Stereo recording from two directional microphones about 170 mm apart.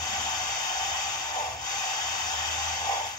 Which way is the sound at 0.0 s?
25° left (ahead or behind).